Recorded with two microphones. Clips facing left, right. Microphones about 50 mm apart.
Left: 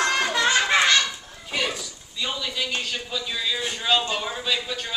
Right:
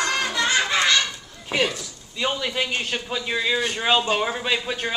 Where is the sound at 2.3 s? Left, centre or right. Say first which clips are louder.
Right 4 dB; right.